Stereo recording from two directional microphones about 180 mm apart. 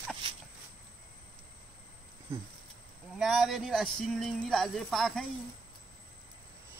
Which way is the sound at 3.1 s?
5° right (ahead or behind).